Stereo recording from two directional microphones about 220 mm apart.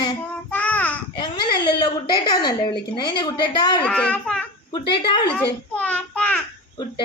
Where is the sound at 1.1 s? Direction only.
20° left (ahead or behind).